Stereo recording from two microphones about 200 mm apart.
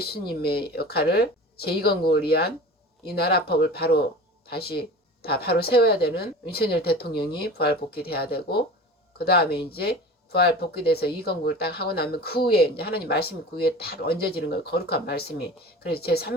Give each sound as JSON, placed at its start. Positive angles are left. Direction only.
{"t": 0.0, "sound": "speech", "side_deg": 50}